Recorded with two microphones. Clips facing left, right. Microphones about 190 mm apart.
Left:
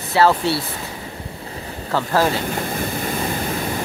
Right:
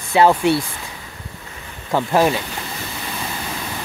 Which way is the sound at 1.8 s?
15° right (ahead or behind).